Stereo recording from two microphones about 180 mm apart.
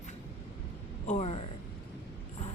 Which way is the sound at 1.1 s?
35° left (ahead or behind).